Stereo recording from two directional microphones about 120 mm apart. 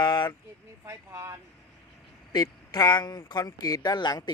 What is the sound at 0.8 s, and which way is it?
Speech, 25° right (ahead or behind).